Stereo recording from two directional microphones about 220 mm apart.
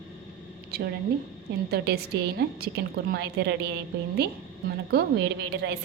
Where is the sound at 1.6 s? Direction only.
45° right (ahead or behind).